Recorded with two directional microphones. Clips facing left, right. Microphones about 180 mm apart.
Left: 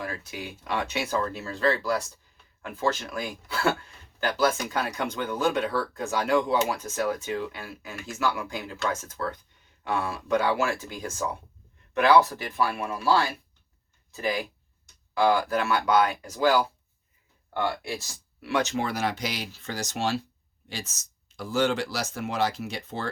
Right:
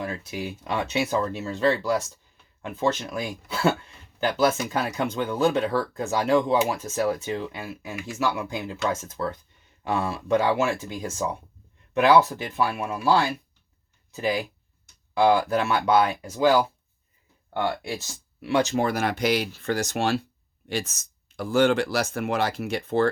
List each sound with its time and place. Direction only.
0.0 s speech: 25° right (ahead or behind)
15.2 s speech: 20° right (ahead or behind)
18.8 s speech: 50° right (ahead or behind)